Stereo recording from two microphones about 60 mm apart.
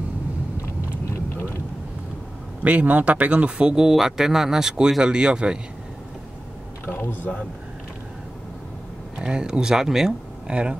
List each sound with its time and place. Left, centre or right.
2.6 s speech: right
6.9 s speech: left
9.2 s speech: centre
10.5 s speech: centre